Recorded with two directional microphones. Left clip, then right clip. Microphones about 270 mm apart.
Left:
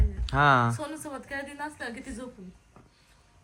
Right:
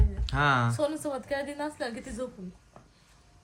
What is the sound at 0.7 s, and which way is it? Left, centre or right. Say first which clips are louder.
A woman's voice: right 7 dB; right.